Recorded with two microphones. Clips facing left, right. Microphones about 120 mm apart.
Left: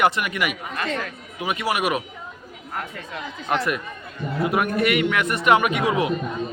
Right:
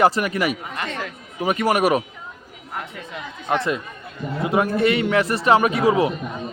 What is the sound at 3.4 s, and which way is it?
A man's voice, 25° right (ahead or behind).